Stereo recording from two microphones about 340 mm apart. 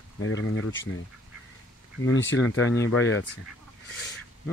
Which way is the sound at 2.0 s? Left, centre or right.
Left.